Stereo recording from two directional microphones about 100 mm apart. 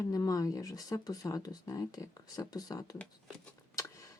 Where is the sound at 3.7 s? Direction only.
30° left (ahead or behind).